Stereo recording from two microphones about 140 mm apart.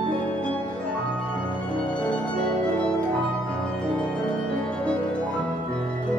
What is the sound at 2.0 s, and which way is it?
Music, 5° left (ahead or behind).